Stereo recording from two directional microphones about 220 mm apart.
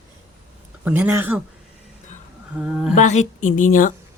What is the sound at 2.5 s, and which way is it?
Speech, 5° right (ahead or behind).